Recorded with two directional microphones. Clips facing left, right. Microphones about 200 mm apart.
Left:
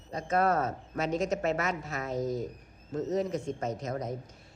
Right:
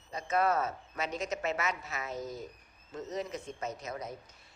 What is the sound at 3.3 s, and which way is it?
Speech, centre (ahead or behind).